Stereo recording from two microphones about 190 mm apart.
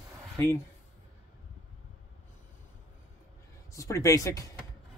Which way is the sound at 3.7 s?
15° left (ahead or behind).